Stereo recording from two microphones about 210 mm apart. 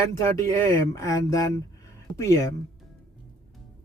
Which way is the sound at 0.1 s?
15° left (ahead or behind).